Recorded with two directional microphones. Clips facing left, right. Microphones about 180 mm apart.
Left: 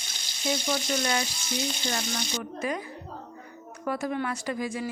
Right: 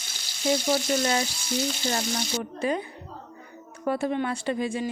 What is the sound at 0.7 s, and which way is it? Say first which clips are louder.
Speech: right 4 dB; 30° right (ahead or behind).